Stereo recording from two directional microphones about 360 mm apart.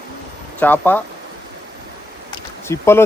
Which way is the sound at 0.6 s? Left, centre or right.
Centre.